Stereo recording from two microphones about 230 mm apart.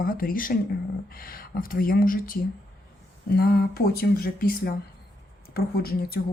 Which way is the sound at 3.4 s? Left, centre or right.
Left.